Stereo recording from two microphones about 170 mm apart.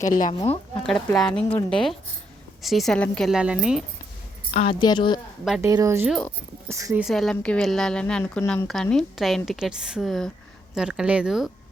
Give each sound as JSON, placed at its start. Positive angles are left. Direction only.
{"t": 0.0, "sound": "a woman's voice", "side_deg": 50}
{"t": 0.9, "sound": "a woman's voice", "side_deg": 0}
{"t": 4.5, "sound": "a woman's voice", "side_deg": 30}
{"t": 5.6, "sound": "speech", "side_deg": -15}
{"t": 6.1, "sound": "a woman's voice", "side_deg": 5}
{"t": 6.7, "sound": "speech", "side_deg": -15}
{"t": 7.0, "sound": "a woman's voice", "side_deg": 0}